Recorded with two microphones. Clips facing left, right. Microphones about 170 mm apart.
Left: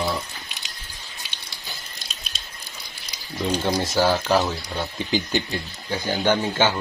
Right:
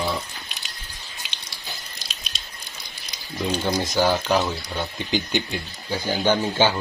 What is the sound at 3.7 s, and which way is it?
Speech, 5° left (ahead or behind).